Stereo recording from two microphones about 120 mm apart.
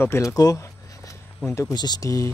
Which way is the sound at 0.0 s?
25° left (ahead or behind).